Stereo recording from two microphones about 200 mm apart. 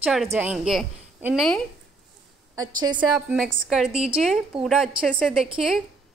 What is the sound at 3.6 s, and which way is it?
A woman's voice, 5° right (ahead or behind).